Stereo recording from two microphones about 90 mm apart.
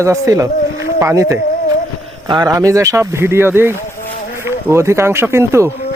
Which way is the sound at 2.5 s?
35° right (ahead or behind).